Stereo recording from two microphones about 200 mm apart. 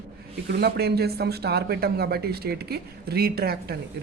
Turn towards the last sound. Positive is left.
turn(degrees=-55)  # may be behind; listen again after turning